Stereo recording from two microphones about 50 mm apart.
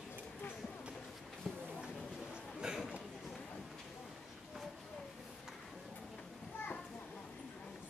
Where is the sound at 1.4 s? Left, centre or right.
Centre.